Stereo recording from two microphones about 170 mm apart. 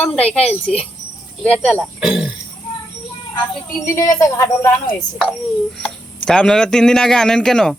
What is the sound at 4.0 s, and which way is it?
Speech, 20° left (ahead or behind).